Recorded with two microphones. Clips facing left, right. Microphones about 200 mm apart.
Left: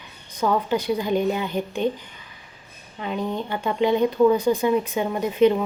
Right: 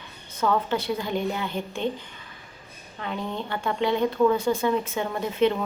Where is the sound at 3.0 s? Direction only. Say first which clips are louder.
Left 4 dB; 15° left (ahead or behind).